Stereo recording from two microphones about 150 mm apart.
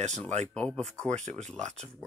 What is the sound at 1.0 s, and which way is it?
Speech, 50° right (ahead or behind).